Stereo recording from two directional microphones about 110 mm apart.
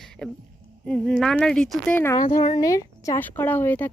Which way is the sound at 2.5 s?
30° left (ahead or behind).